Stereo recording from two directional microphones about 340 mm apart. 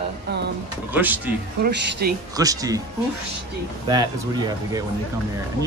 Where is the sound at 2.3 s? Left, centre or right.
Centre.